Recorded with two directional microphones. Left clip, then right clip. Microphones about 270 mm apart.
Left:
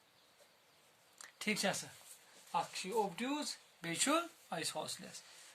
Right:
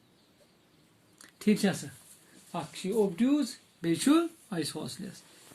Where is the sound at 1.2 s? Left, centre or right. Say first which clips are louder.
Right 8 dB; left.